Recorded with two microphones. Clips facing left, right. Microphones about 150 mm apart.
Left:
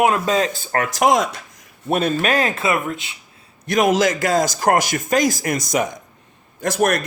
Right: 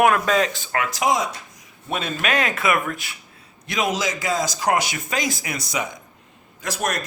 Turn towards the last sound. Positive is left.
turn(degrees=55)  # may be behind; listen again after turning